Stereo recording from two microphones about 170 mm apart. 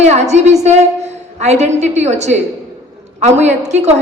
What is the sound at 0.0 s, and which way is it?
A woman's voice, 40° right (ahead or behind).